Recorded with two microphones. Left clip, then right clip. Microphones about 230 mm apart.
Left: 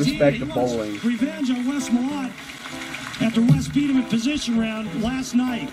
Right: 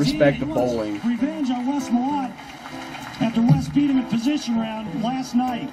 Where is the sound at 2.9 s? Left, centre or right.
Left.